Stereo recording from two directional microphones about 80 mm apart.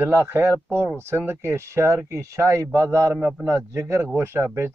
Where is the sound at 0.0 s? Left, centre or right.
Right.